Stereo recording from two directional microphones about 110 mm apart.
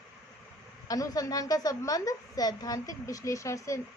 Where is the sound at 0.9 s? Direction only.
35° left (ahead or behind).